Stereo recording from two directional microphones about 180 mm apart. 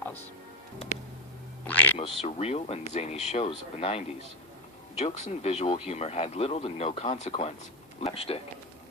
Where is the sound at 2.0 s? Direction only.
35° left (ahead or behind).